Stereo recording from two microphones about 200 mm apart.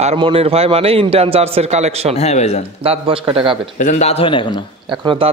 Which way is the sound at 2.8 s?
30° right (ahead or behind).